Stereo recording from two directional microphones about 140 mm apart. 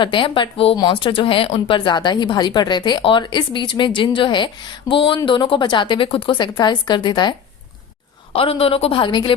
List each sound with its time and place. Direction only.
0.0 s a woman's voice: 35° left (ahead or behind)
8.3 s a woman's voice: 45° left (ahead or behind)